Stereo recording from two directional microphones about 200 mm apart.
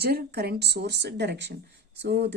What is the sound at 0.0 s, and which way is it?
Speech, 55° right (ahead or behind).